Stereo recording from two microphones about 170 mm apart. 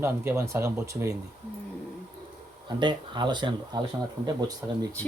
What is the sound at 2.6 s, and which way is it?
Speech, 25° right (ahead or behind).